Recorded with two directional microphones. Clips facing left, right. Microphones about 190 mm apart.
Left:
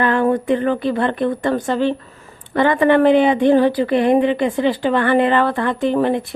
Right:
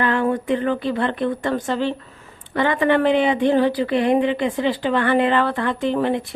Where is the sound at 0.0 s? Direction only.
50° left (ahead or behind).